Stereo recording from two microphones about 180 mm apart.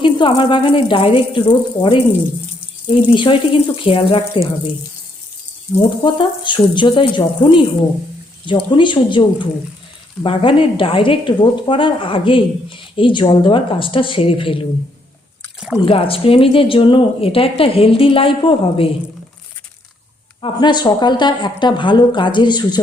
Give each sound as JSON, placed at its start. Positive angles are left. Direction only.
{"t": 0.0, "sound": "speech", "side_deg": 25}
{"t": 6.0, "sound": "speech", "side_deg": 25}
{"t": 15.9, "sound": "a woman's voice", "side_deg": 30}
{"t": 20.4, "sound": "speech", "side_deg": 25}